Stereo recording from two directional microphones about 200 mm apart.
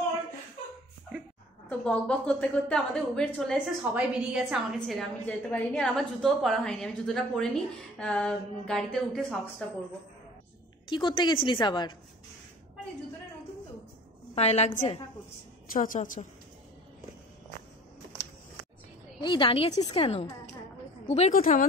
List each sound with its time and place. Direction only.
1.7 s a woman's voice: 5° left (ahead or behind)
10.9 s a woman's voice: 25° left (ahead or behind)
14.3 s a woman's voice: 30° left (ahead or behind)
19.2 s a woman's voice: 25° left (ahead or behind); by 21.6 s 40° left (ahead or behind)